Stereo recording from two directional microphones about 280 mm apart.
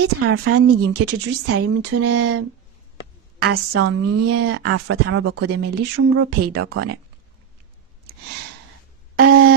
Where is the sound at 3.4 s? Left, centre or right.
Right.